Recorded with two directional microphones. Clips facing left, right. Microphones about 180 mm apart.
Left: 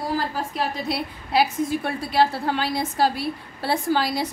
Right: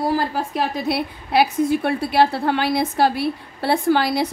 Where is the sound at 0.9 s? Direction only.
65° right (ahead or behind).